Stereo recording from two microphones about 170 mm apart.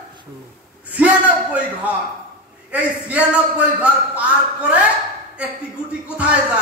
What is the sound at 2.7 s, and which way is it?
A man's voice, 10° right (ahead or behind).